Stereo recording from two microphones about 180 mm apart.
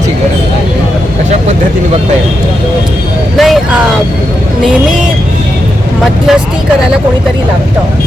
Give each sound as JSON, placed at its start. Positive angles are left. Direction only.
{"t": 3.3, "sound": "vehicle", "side_deg": 0}